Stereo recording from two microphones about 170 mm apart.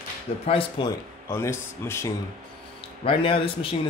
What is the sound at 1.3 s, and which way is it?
Speech, 15° left (ahead or behind).